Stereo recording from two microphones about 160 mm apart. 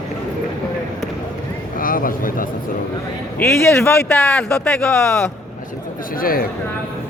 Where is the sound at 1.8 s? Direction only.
60° left (ahead or behind).